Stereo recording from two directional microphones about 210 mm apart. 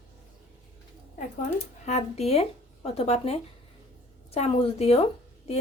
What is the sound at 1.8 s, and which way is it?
A woman's voice, 30° left (ahead or behind).